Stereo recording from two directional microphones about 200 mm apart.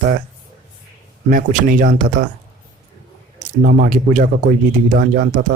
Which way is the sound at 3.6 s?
45° right (ahead or behind).